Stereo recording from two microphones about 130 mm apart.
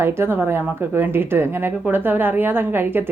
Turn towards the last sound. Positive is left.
turn(degrees=-15)  # may be behind; listen again after turning